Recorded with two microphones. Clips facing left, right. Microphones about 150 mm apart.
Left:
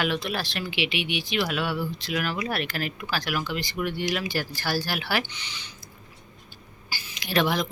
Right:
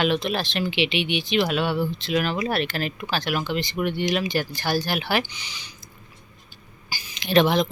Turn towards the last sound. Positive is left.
turn(degrees=-25)  # may be behind; listen again after turning